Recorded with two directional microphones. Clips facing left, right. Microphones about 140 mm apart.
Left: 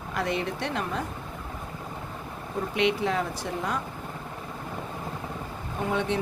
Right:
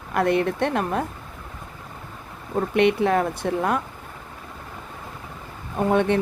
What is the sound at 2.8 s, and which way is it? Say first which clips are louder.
A woman's voice: right 6 dB; 55° right (ahead or behind).